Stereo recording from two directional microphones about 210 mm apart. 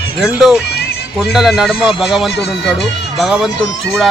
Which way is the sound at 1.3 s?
Centre (ahead or behind).